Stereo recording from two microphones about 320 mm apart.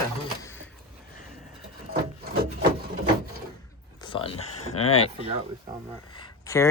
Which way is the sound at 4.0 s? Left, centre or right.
Centre.